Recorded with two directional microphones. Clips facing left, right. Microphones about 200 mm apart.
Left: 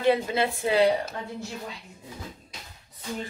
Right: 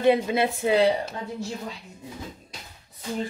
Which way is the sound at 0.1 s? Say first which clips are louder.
Right 2 dB; 20° right (ahead or behind).